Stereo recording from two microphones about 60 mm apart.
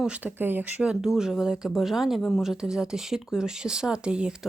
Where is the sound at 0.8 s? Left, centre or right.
Centre.